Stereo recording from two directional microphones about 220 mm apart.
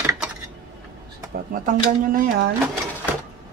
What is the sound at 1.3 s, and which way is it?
Speech, 40° right (ahead or behind).